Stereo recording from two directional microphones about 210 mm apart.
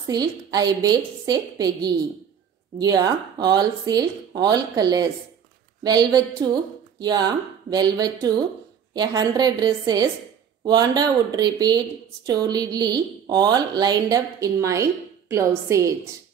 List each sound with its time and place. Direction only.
0.0 s speech: 20° right (ahead or behind)